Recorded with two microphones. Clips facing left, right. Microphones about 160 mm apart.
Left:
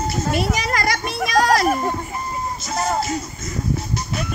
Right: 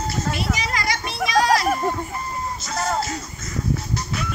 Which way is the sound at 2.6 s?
20° left (ahead or behind).